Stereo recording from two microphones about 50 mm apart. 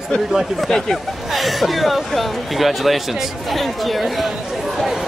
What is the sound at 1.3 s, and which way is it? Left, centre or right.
Speech, centre.